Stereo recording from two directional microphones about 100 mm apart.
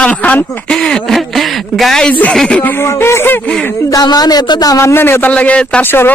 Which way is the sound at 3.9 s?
40° left (ahead or behind).